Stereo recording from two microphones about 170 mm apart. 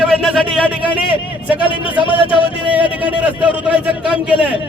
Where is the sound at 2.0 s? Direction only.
30° left (ahead or behind).